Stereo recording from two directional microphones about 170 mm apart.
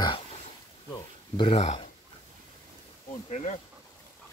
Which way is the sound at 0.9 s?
30° left (ahead or behind).